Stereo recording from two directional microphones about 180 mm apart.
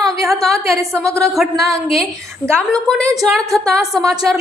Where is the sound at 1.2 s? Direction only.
Centre (ahead or behind).